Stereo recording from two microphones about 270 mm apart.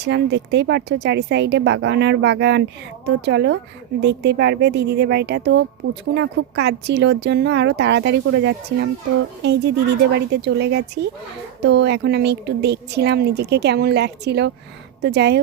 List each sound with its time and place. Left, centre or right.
0.0 s speech: right
10.2 s speech: right